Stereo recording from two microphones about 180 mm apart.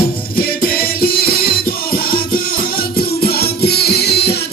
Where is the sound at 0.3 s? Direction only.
55° left (ahead or behind).